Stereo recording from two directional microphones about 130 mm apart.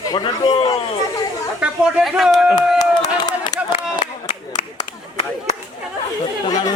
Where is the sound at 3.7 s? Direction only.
50° left (ahead or behind).